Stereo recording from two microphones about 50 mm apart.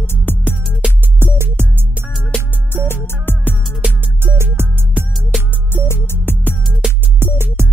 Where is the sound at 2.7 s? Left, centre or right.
Left.